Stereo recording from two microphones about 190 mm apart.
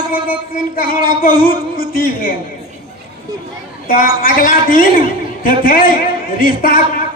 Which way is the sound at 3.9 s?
45° left (ahead or behind).